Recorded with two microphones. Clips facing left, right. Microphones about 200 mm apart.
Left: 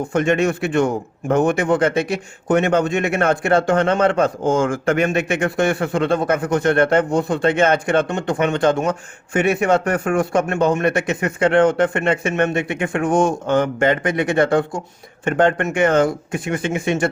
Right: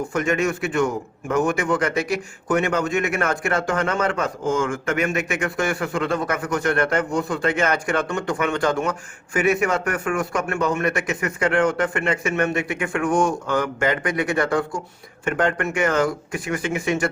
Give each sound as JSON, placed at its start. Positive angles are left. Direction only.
{"t": 0.1, "sound": "speech", "side_deg": 30}